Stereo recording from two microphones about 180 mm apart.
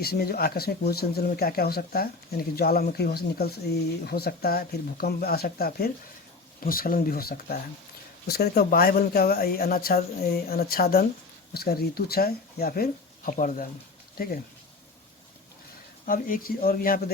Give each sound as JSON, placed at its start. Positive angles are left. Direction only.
{"t": 0.0, "sound": "speech", "side_deg": 60}
{"t": 16.0, "sound": "speech", "side_deg": 50}